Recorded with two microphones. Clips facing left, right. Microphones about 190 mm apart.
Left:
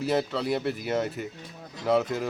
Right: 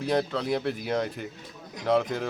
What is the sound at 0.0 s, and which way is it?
Speech, 5° left (ahead or behind).